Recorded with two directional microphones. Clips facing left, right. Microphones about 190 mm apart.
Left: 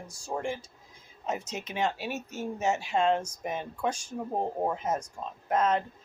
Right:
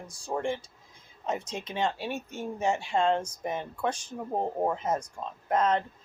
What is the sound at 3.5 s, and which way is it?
Speech, 10° left (ahead or behind).